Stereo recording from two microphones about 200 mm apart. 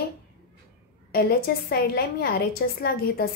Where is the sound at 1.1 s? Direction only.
50° left (ahead or behind).